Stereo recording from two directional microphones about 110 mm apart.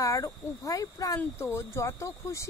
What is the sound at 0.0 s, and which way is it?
Speech, 30° left (ahead or behind).